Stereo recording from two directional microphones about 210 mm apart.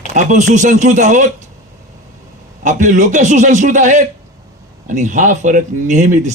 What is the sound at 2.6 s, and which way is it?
A man's voice, 35° right (ahead or behind).